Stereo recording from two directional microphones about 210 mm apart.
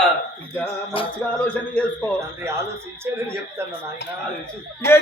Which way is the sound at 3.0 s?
10° right (ahead or behind).